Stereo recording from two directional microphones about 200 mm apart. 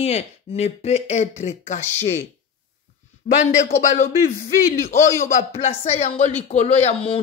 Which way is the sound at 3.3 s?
40° left (ahead or behind).